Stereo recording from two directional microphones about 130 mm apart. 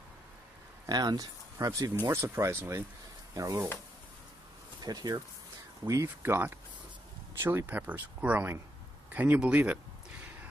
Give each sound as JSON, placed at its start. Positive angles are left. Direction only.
{"t": 0.8, "sound": "speech", "side_deg": -30}
{"t": 4.8, "sound": "speech", "side_deg": -30}
{"t": 5.9, "sound": "speech", "side_deg": -20}